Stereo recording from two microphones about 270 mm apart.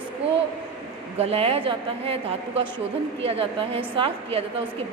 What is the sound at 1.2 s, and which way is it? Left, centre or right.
Speech, right.